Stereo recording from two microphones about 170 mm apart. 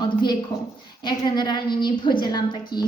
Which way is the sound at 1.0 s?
25° left (ahead or behind).